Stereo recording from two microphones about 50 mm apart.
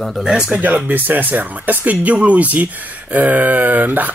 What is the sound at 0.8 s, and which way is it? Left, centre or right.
Speech, right.